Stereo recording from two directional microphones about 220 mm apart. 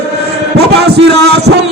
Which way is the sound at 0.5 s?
50° right (ahead or behind).